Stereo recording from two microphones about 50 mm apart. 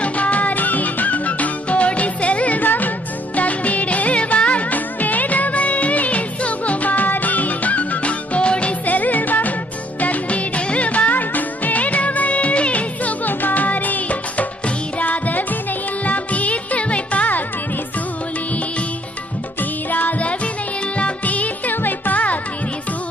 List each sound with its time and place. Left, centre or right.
0.0 s music: left
10.0 s music of bollywood: left
14.9 s music: left
19.9 s music: left